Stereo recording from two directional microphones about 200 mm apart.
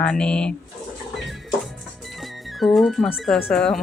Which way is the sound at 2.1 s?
Centre (ahead or behind).